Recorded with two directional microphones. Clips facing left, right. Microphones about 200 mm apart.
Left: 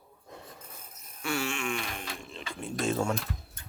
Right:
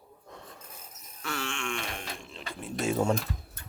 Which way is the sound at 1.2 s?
10° left (ahead or behind).